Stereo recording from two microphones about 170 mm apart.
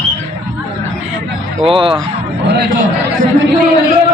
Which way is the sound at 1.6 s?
30° right (ahead or behind).